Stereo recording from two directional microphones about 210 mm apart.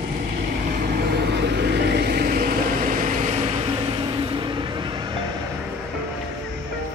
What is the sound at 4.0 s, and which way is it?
Vehicle, 20° right (ahead or behind).